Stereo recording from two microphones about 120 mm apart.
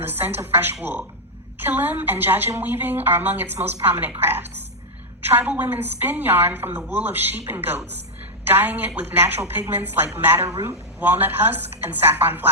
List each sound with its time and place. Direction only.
0.0 s a woman's voice: 15° right (ahead or behind)